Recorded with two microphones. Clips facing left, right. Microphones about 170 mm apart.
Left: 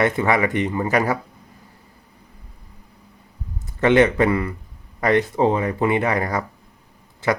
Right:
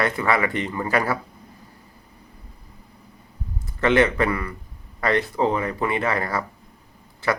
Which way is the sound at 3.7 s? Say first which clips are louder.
Left 3 dB; 20° left (ahead or behind).